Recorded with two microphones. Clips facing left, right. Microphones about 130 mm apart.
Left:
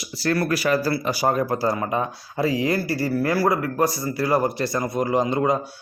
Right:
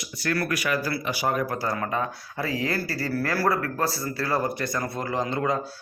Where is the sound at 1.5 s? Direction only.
25° left (ahead or behind).